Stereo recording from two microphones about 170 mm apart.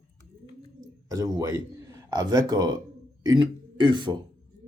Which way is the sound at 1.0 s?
20° right (ahead or behind).